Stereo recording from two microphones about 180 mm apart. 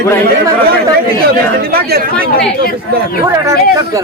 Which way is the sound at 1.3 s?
60° right (ahead or behind).